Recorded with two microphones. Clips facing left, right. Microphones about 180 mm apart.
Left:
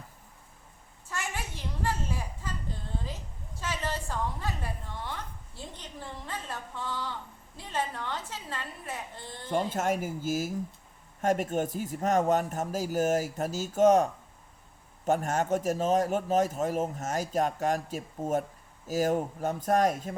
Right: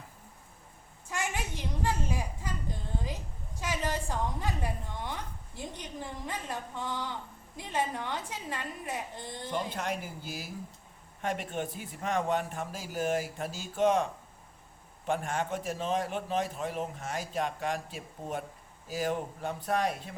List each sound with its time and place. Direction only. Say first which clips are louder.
1.1 s a sound: right 2 dB; 15° right (ahead or behind)
3.6 s a woman's voice: right 1 dB; 15° right (ahead or behind)
9.5 s a man's voice: left 6 dB; 45° left (ahead or behind)